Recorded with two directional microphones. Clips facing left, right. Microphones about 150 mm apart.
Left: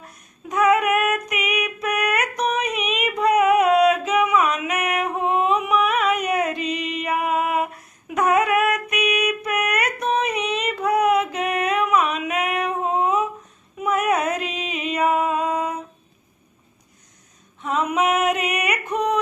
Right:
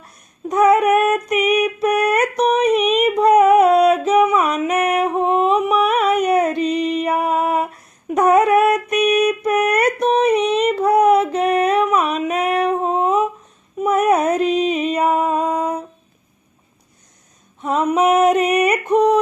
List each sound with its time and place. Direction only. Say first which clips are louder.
0.4 s female singing: right 5 dB; 35° right (ahead or behind)
2.7 s music: right 9 dB; 35° right (ahead or behind)
17.6 s female singing: right 5 dB; 35° right (ahead or behind)